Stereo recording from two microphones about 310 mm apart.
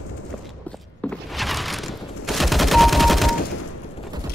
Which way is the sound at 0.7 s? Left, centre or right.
Centre.